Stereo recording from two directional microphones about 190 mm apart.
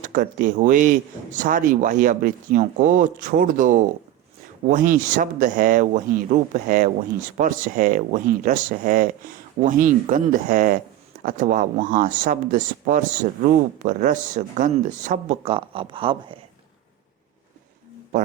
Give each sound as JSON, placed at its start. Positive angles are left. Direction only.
{"t": 0.0, "sound": "speech", "side_deg": -45}